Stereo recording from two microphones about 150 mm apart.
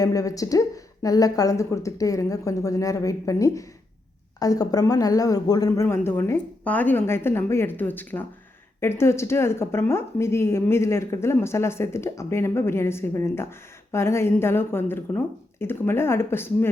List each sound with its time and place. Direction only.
0.0 s a woman's voice: 25° left (ahead or behind)